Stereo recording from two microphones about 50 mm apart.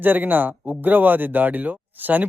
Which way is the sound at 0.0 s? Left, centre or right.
Right.